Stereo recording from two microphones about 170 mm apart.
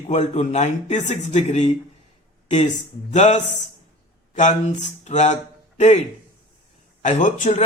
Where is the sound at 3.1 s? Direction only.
45° left (ahead or behind).